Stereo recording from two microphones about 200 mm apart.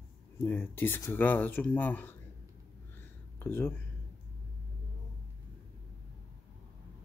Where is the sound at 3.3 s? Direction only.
10° left (ahead or behind).